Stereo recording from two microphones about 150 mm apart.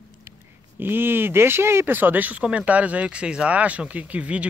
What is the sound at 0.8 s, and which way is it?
Speech, 15° right (ahead or behind).